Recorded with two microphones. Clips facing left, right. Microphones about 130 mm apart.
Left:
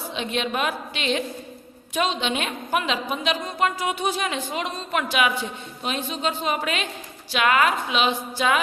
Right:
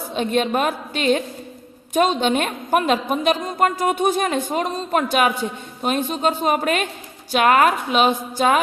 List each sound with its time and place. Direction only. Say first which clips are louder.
0.1 s a woman's voice: right 7 dB; 45° right (ahead or behind)